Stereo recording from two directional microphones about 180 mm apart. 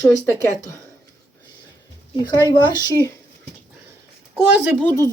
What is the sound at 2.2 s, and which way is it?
Speech, 20° left (ahead or behind).